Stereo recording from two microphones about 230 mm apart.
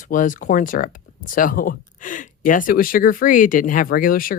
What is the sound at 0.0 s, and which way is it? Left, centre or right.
Speech, left.